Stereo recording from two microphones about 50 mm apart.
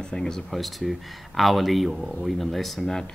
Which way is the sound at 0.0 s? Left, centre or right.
Centre.